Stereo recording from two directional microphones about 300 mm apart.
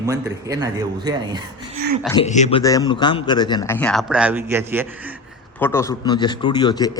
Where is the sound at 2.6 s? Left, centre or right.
Centre.